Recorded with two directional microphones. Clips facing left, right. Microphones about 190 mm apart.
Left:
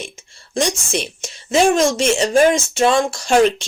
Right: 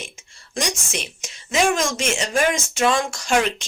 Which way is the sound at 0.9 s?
30° left (ahead or behind).